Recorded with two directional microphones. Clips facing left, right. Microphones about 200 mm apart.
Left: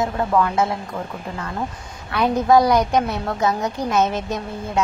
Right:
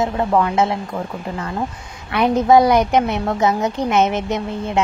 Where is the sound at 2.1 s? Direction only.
20° right (ahead or behind).